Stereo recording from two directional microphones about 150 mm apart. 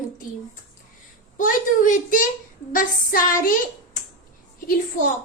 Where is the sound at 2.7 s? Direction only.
65° left (ahead or behind).